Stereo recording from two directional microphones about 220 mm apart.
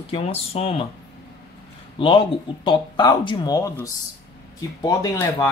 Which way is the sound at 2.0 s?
20° left (ahead or behind).